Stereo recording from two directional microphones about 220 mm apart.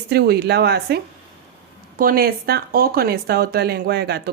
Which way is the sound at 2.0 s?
40° right (ahead or behind).